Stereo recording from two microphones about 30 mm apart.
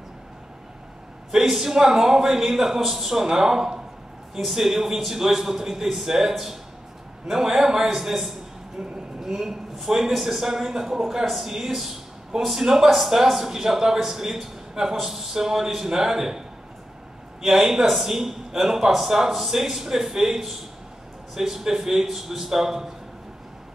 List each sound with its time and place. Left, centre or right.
1.4 s a man's voice: centre
4.4 s a man's voice: centre
8.8 s speech: right
9.3 s a woman's voice: centre
12.6 s a man's voice: centre